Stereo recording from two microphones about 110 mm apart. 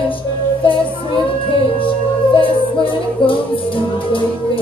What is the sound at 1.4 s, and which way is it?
Music, 50° left (ahead or behind).